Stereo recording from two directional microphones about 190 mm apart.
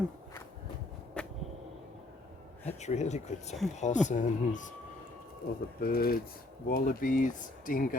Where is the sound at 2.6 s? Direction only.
35° left (ahead or behind).